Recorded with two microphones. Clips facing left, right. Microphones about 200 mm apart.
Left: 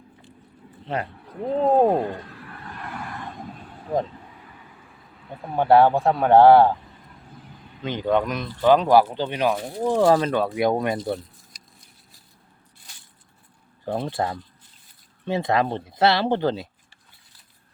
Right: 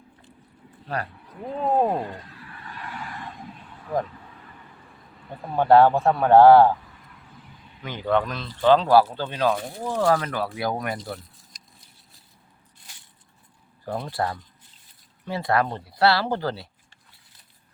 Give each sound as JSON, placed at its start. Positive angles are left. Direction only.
{"t": 0.9, "sound": "speech", "side_deg": 20}
{"t": 1.5, "sound": "a sound", "side_deg": 35}
{"t": 2.0, "sound": "a sound", "side_deg": 55}
{"t": 3.5, "sound": "vehicle", "side_deg": 40}
{"t": 5.2, "sound": "speech", "side_deg": 0}
{"t": 5.5, "sound": "speech", "side_deg": 15}
{"t": 7.8, "sound": "speech", "side_deg": 20}
{"t": 13.8, "sound": "speech", "side_deg": 25}